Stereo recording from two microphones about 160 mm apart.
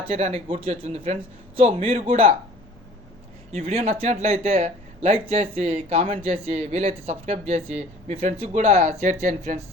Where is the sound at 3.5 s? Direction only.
40° right (ahead or behind).